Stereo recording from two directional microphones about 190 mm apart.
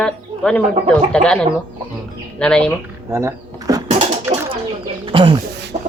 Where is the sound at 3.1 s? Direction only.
15° right (ahead or behind).